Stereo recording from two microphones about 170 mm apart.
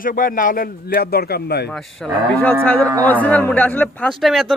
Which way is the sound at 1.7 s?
Centre (ahead or behind).